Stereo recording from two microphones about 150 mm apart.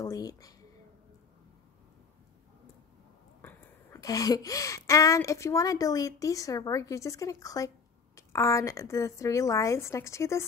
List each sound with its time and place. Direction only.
0.0 s speech: 25° left (ahead or behind)
3.4 s a woman's voice: 20° left (ahead or behind)